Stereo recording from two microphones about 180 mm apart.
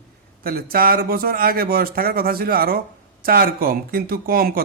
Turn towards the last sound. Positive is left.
turn(degrees=-55)  # may be behind; listen again after turning